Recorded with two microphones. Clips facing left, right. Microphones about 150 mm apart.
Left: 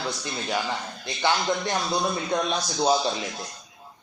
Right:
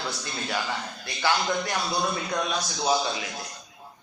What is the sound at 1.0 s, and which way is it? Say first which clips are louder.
A man's voice: left 1 dB; 20° left (ahead or behind).